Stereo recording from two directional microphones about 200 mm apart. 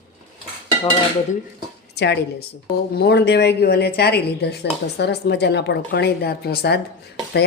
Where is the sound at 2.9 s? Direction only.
55° left (ahead or behind).